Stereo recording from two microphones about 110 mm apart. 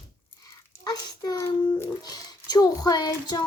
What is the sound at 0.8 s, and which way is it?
A child's voice, 35° left (ahead or behind).